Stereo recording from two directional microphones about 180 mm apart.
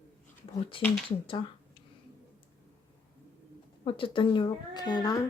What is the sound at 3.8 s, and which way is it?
Speech, 30° left (ahead or behind).